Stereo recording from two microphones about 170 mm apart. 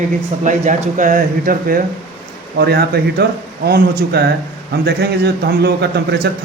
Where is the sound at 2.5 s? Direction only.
70° right (ahead or behind).